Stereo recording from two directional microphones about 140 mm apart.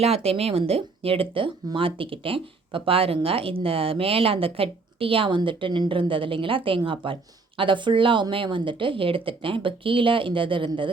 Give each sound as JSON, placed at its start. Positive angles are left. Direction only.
{"t": 0.0, "sound": "speech", "side_deg": -45}